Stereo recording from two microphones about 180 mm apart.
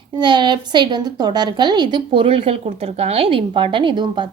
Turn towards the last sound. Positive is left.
turn(degrees=-25)  # may be behind; listen again after turning